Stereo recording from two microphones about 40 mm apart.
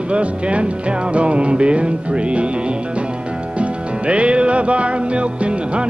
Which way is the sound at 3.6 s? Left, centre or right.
Right.